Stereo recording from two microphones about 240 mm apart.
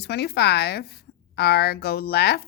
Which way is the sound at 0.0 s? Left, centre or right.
Left.